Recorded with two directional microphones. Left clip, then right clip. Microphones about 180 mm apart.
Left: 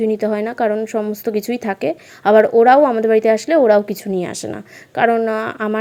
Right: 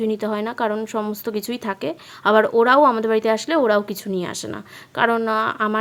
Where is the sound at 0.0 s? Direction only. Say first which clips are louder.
Left 5 dB; 10° left (ahead or behind).